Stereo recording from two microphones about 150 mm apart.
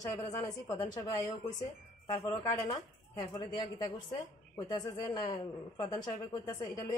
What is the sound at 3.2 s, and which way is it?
Speech, 25° left (ahead or behind).